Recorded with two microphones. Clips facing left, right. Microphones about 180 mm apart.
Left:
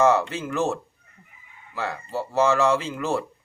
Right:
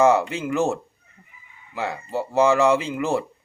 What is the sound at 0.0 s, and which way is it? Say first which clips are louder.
Speech: right 2 dB; 15° right (ahead or behind).